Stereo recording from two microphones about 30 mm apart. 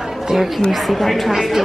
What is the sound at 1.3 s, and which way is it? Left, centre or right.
Speech, centre.